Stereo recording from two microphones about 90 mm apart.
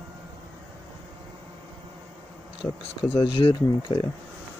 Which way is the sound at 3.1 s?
75° left (ahead or behind).